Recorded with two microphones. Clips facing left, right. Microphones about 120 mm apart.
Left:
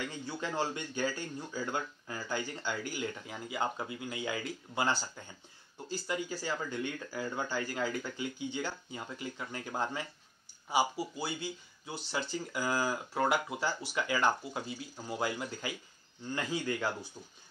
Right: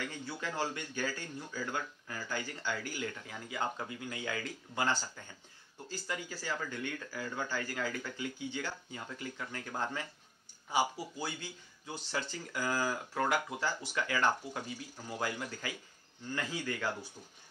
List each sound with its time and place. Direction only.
0.0 s speech: 20° left (ahead or behind)